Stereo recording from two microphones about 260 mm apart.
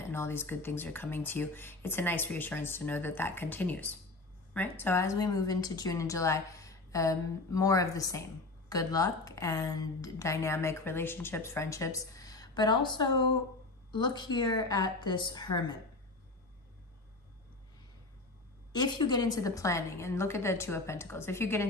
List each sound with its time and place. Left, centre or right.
0.1 s a woman's voice: centre
18.7 s a woman's voice: centre